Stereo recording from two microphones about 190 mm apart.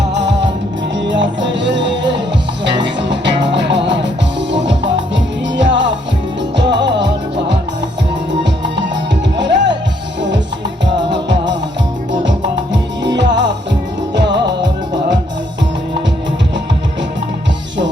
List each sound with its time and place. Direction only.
0.1 s music: 70° right (ahead or behind)
9.4 s music: 70° right (ahead or behind)